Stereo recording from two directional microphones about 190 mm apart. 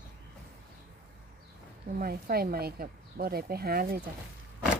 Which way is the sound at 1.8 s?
50° right (ahead or behind).